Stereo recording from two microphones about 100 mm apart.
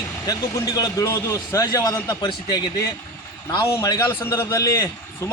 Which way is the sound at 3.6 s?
35° left (ahead or behind).